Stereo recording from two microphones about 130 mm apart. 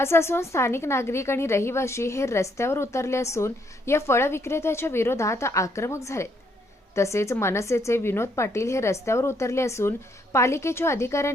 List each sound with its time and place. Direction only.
0.0 s a woman's voice: 20° left (ahead or behind)